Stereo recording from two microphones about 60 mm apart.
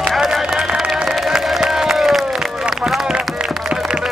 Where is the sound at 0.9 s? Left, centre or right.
Centre.